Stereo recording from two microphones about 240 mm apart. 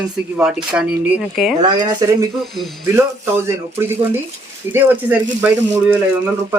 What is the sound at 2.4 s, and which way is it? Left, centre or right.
Speech, centre.